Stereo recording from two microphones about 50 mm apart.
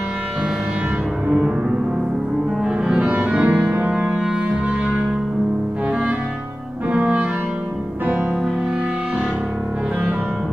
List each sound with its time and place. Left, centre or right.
2.6 s music: centre
6.9 s clarinet: right